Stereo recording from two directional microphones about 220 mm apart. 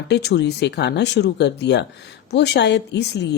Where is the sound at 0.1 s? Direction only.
50° left (ahead or behind).